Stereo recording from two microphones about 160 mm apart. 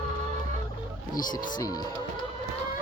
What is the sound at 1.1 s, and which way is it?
Speech, 25° left (ahead or behind).